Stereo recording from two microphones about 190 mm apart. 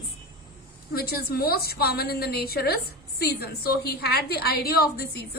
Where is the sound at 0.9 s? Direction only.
55° left (ahead or behind).